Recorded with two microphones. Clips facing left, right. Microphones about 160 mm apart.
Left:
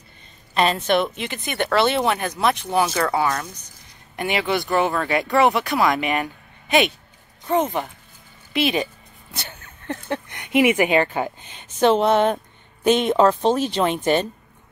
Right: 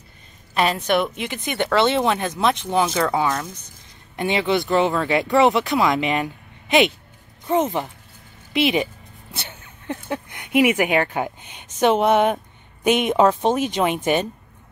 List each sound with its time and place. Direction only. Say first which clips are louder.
0.6 s speech: left 1 dB; 10° right (ahead or behind)
2.6 s speech: even; 10° left (ahead or behind)
3.0 s speech: right 1 dB; 15° right (ahead or behind)
8.5 s speech: right 2 dB; 20° right (ahead or behind)
9.8 s speech: left 1 dB; 10° right (ahead or behind)